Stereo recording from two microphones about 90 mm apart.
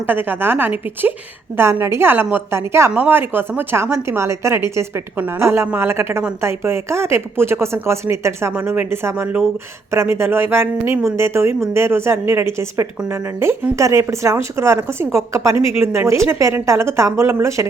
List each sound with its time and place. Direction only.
0.1 s speech: 20° right (ahead or behind)